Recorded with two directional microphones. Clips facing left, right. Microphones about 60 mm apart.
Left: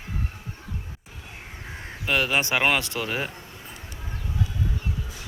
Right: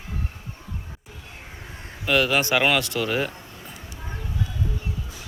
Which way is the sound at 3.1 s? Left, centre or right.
Centre.